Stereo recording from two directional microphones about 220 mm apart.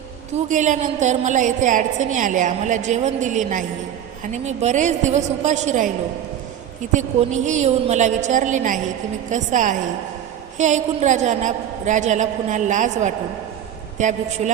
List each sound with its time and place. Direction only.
0.4 s a woman's voice: 35° right (ahead or behind)
6.9 s a woman's voice: 35° right (ahead or behind)